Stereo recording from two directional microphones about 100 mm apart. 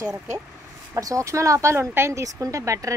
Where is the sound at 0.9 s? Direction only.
30° right (ahead or behind).